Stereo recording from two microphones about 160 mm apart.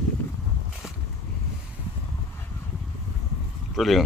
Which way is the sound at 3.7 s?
Centre (ahead or behind).